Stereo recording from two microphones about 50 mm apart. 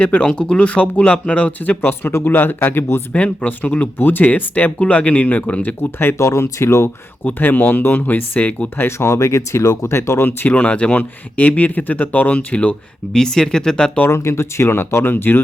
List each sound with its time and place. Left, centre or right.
0.0 s speech: left
1.8 s speech: left
3.1 s speech: left
3.9 s speech: left
6.1 s speech: left
7.3 s speech: left
9.0 s speech: left
10.5 s speech: left
13.1 s speech: centre
14.1 s speech: left
15.1 s speech: left